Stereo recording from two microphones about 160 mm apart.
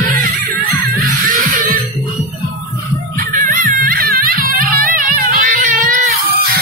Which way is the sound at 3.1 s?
60° right (ahead or behind).